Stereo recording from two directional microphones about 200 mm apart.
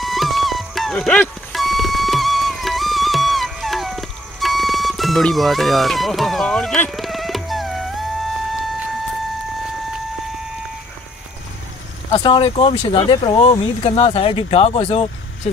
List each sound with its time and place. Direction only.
0.0 s music: centre (ahead or behind)
12.1 s speech: 25° left (ahead or behind)